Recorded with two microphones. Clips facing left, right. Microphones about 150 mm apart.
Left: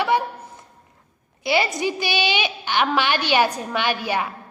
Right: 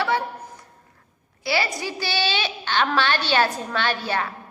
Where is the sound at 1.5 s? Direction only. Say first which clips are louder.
Left 4 dB; 20° left (ahead or behind).